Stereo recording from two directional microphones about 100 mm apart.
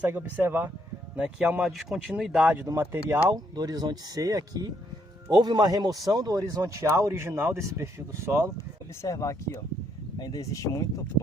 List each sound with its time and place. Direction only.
0.0 s speech: 20° right (ahead or behind)
2.9 s speech: 25° right (ahead or behind)
3.3 s a man's voice: 40° right (ahead or behind); by 8.4 s 25° right (ahead or behind)
9.0 s speech: 30° left (ahead or behind)